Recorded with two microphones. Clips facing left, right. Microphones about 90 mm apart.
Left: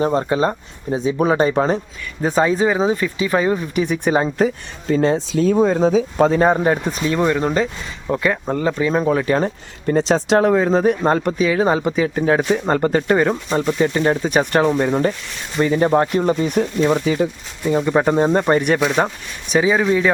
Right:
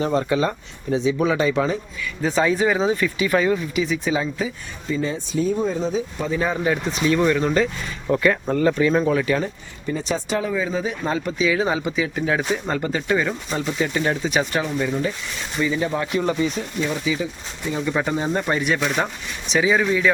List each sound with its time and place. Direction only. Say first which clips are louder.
0.0 s speech: left 3 dB; 35° left (ahead or behind)
2.2 s speech: left 3 dB; 35° left (ahead or behind)
3.8 s speech: left 4 dB; 50° left (ahead or behind)
6.5 s speech: left 5 dB; 40° left (ahead or behind); by 9.0 s 15° left (ahead or behind)
9.0 s speech: left 3 dB; 35° left (ahead or behind)
9.8 s speech: left 8 dB; 75° left (ahead or behind); by 13.7 s 40° left (ahead or behind)
13.7 s speech: left 4 dB; 30° left (ahead or behind)
14.3 s speech: left 6 dB; 50° left (ahead or behind)
16.5 s speech: left 8 dB; 60° left (ahead or behind)
17.7 s speech: left 7 dB; 40° left (ahead or behind)
19.5 s speech: left 3 dB; 25° left (ahead or behind)